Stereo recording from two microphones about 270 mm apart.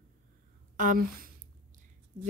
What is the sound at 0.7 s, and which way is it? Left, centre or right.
Speech, right.